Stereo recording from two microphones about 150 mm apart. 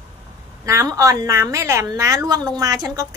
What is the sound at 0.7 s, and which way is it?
A woman's voice, 20° right (ahead or behind).